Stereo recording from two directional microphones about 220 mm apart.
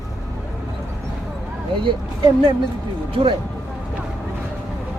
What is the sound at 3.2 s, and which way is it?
Speech, 25° right (ahead or behind).